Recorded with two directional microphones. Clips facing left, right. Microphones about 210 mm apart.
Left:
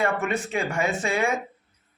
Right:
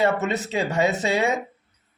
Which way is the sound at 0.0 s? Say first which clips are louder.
Right 3 dB; 20° right (ahead or behind).